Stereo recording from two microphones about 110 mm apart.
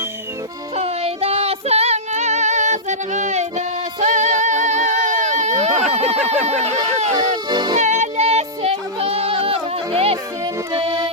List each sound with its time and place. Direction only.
0.8 s female singing: 65° right (ahead or behind); by 3.4 s 90° right
4.0 s music: 90° right
5.9 s a sound: 75° right (ahead or behind)
6.4 s speech: 80° right
7.2 s speech: 40° right (ahead or behind)
7.8 s music: 90° right; by 10.2 s 60° right (ahead or behind)
10.4 s music: 50° right (ahead or behind)